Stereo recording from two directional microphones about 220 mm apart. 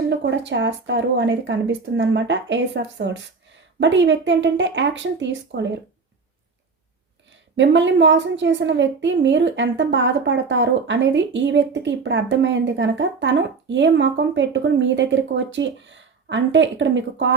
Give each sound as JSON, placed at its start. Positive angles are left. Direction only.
{"t": 0.1, "sound": "a woman's voice", "side_deg": -55}
{"t": 7.5, "sound": "a woman's voice", "side_deg": -55}